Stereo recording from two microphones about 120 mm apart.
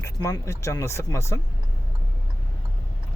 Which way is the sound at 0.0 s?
25° left (ahead or behind).